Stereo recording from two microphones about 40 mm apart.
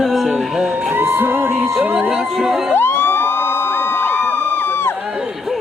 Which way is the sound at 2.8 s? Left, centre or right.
Left.